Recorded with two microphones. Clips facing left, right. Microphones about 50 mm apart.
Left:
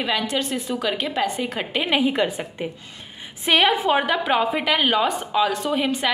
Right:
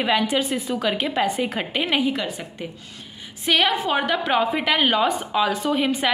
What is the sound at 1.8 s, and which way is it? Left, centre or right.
Speech, centre.